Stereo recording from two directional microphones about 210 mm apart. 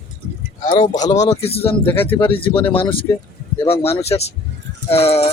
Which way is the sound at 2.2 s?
25° left (ahead or behind).